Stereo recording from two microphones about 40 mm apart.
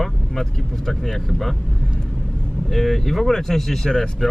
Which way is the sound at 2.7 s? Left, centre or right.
Centre.